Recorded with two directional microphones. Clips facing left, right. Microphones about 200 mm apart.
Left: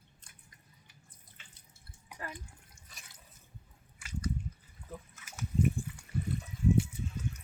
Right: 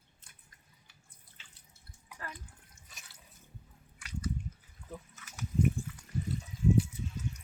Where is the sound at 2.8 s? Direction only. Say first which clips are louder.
Right 1 dB; centre (ahead or behind).